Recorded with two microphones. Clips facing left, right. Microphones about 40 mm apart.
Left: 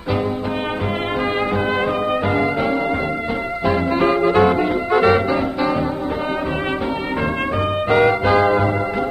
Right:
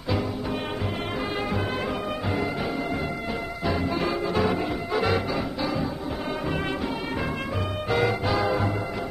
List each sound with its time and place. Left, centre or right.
3.6 s music: left
7.9 s music: left